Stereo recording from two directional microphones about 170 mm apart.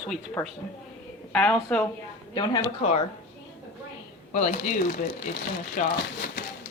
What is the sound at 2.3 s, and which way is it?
Speech, 25° left (ahead or behind).